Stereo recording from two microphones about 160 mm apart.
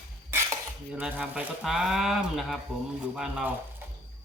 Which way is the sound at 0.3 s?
15° right (ahead or behind).